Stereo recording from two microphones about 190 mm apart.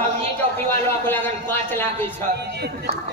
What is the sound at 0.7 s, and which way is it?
Speech, 10° left (ahead or behind).